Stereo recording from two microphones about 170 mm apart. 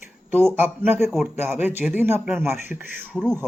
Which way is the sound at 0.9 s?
15° right (ahead or behind).